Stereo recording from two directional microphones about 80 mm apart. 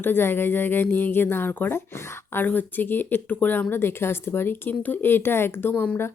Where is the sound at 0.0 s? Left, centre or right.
Left.